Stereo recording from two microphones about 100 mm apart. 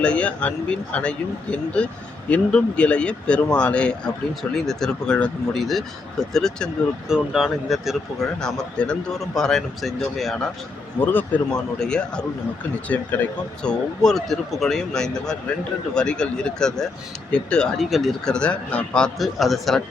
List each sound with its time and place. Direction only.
0.0 s speech: 10° left (ahead or behind)
11.0 s speech: 20° left (ahead or behind)
11.5 s speech: 10° left (ahead or behind)
18.3 s speech: 10° left (ahead or behind)